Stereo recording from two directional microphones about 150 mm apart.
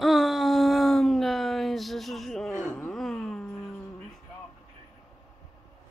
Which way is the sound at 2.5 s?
15° left (ahead or behind).